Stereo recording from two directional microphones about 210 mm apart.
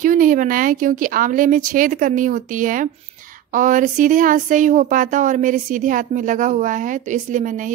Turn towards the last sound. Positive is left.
turn(degrees=-40)  # may be behind; listen again after turning